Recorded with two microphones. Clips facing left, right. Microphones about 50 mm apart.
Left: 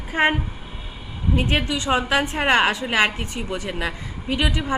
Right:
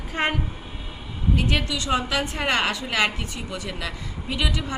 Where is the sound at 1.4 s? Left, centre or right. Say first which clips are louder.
Left 4 dB; left.